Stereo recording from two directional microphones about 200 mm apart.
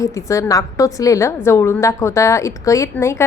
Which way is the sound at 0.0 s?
15° left (ahead or behind).